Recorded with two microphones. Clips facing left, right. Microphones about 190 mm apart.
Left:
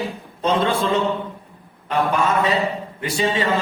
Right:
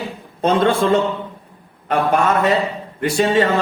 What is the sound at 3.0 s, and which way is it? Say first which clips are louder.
Speech: right 6 dB; 50° right (ahead or behind).